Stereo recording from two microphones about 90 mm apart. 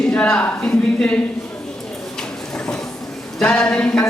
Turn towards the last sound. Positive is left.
turn(degrees=10)  # may be behind; listen again after turning